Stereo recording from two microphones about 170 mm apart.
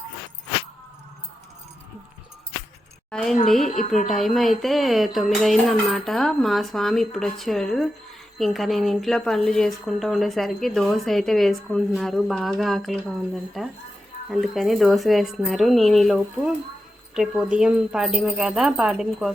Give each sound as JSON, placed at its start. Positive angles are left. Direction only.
{"t": 3.1, "sound": "a woman's voice", "side_deg": 5}